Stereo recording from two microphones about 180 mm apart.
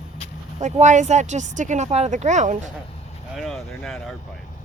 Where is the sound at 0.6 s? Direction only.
40° right (ahead or behind).